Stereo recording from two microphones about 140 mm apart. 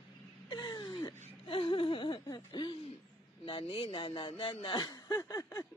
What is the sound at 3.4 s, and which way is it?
Chuckle, 40° left (ahead or behind).